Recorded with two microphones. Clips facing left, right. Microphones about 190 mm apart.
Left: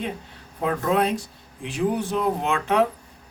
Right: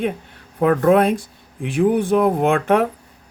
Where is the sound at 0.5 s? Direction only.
60° right (ahead or behind).